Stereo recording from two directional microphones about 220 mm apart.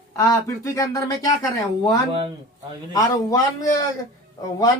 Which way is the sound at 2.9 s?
15° left (ahead or behind).